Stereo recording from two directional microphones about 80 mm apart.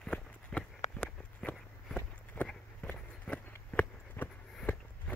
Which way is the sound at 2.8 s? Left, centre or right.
Centre.